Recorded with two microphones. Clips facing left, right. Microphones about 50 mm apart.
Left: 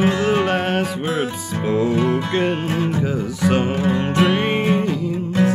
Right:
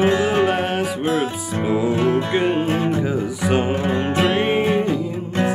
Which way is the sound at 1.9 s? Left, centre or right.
Right.